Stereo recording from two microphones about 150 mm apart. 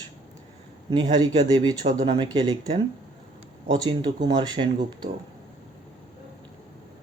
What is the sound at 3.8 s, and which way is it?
Speech, 30° right (ahead or behind).